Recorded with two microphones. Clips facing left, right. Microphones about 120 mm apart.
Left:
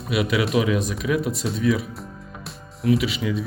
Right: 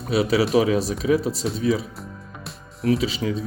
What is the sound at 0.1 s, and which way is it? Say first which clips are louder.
Speech: right 3 dB; 35° right (ahead or behind).